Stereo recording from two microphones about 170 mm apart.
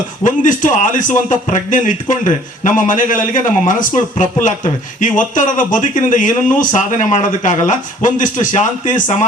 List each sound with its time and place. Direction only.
0.3 s a man's voice: 50° left (ahead or behind)